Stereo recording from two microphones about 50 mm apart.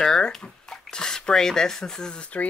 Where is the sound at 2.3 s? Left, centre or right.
Left.